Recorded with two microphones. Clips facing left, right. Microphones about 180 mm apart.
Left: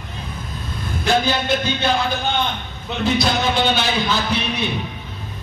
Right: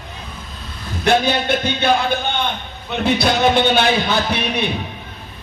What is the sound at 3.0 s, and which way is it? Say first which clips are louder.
Music: right 3 dB; 60° right (ahead or behind).